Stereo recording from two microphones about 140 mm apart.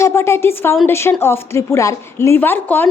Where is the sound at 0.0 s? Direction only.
20° left (ahead or behind).